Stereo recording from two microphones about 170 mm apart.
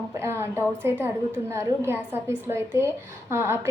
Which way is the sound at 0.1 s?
15° right (ahead or behind).